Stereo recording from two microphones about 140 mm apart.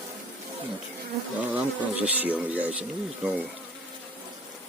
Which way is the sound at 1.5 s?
10° right (ahead or behind).